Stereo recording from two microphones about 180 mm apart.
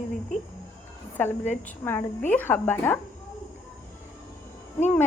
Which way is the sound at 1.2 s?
10° left (ahead or behind).